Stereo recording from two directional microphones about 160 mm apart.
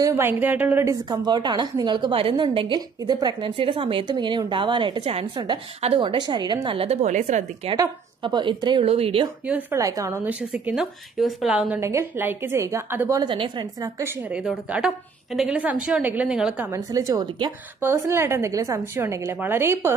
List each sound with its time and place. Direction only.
0.0 s a woman's voice: 15° right (ahead or behind); by 7.7 s 45° right (ahead or behind)
7.7 s a woman's voice: 25° right (ahead or behind)
9.5 s a woman's voice: 15° right (ahead or behind)
10.5 s a woman's voice: 5° right (ahead or behind)
11.8 s a woman's voice: 15° right (ahead or behind)
13.2 s a woman's voice: 30° right (ahead or behind)
15.3 s a woman's voice: 5° right (ahead or behind)
16.7 s a woman's voice: 20° right (ahead or behind)